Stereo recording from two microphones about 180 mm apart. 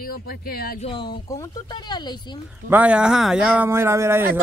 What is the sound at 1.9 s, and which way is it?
Speech, 25° left (ahead or behind).